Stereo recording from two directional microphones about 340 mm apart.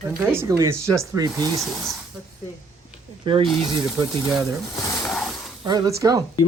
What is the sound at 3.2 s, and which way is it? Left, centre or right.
Speech, centre.